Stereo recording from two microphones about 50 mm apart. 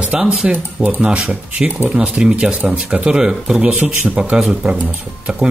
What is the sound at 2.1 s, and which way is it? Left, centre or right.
Speech, centre.